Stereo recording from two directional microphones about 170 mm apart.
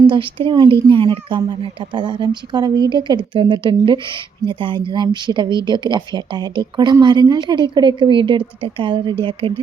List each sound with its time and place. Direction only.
0.0 s speech: 30° right (ahead or behind)